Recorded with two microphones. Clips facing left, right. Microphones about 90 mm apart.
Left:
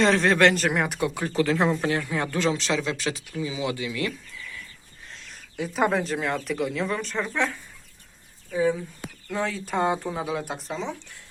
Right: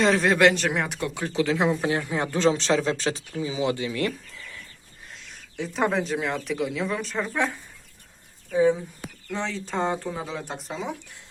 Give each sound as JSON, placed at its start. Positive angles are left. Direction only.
{"t": 0.0, "sound": "speech", "side_deg": -5}
{"t": 1.9, "sound": "speech", "side_deg": -20}
{"t": 5.2, "sound": "speech", "side_deg": 5}
{"t": 8.5, "sound": "speech", "side_deg": -25}
{"t": 9.3, "sound": "speech", "side_deg": 5}